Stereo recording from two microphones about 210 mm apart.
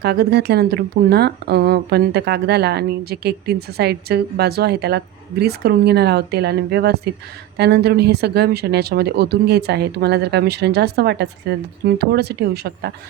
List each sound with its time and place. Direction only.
0.0 s speech: 50° right (ahead or behind)